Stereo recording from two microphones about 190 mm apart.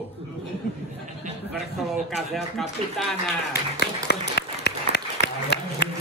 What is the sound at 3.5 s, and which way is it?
Applause, 60° left (ahead or behind).